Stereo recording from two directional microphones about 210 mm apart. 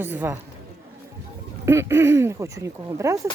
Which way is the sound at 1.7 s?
15° right (ahead or behind).